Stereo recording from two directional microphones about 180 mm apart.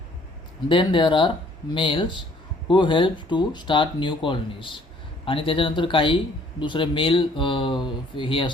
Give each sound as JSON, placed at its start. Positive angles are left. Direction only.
{"t": 0.7, "sound": "speech", "side_deg": 25}